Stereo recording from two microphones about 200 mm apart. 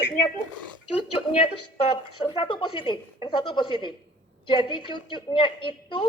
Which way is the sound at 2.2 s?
25° left (ahead or behind).